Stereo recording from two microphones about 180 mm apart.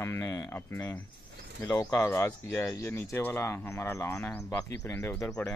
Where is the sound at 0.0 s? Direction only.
15° left (ahead or behind).